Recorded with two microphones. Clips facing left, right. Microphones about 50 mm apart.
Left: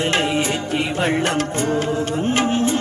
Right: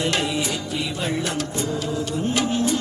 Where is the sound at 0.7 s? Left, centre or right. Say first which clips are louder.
Left 7 dB; left.